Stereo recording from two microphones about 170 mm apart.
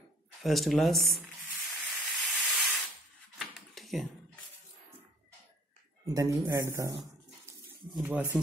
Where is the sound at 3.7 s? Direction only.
Centre (ahead or behind).